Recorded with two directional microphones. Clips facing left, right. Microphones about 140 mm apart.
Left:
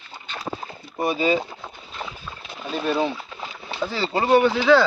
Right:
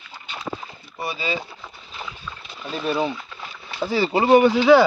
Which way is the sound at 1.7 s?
25° left (ahead or behind).